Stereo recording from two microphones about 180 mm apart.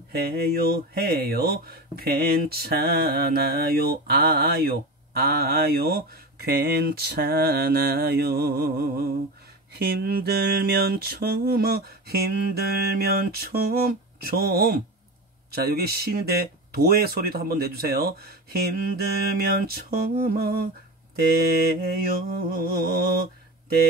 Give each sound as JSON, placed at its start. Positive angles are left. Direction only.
{"t": 0.1, "sound": "speech", "side_deg": -60}